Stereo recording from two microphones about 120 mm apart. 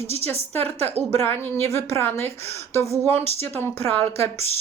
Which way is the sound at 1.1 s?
20° left (ahead or behind).